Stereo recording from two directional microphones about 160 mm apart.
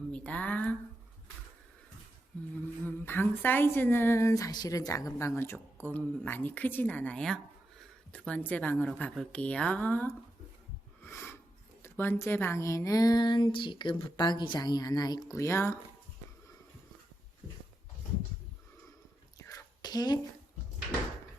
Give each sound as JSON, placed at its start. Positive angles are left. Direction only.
{"t": 0.1, "sound": "speech", "side_deg": 10}
{"t": 2.8, "sound": "a woman's voice", "side_deg": 15}
{"t": 11.0, "sound": "a sound", "side_deg": 15}
{"t": 11.8, "sound": "a woman's voice", "side_deg": 15}
{"t": 19.4, "sound": "whispering", "side_deg": 20}